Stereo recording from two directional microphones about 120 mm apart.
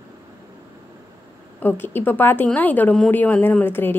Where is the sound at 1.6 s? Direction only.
15° left (ahead or behind).